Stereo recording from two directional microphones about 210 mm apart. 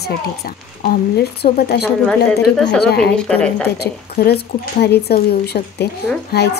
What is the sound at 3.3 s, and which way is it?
Speech, 5° left (ahead or behind).